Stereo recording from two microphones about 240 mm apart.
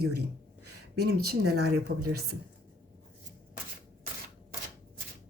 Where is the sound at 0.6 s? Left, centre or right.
Right.